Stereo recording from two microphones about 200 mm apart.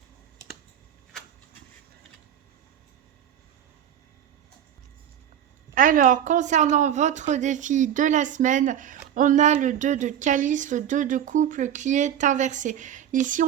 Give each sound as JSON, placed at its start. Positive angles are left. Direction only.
{"t": 5.7, "sound": "a woman's voice", "side_deg": -45}